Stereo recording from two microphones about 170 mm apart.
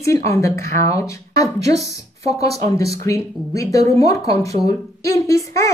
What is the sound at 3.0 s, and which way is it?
A woman's voice, 20° left (ahead or behind).